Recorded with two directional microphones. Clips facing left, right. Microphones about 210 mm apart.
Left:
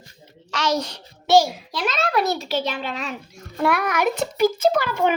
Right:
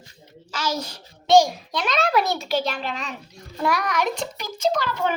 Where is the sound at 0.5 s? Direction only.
5° right (ahead or behind).